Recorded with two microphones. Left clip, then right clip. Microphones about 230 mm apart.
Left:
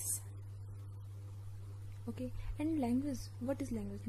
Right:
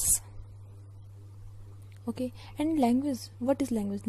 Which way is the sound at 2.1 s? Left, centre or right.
Right.